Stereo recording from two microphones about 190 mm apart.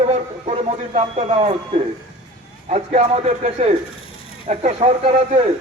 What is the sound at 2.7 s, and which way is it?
Speech, 35° right (ahead or behind).